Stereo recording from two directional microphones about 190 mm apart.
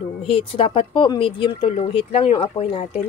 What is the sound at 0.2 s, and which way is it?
Speech, 30° left (ahead or behind).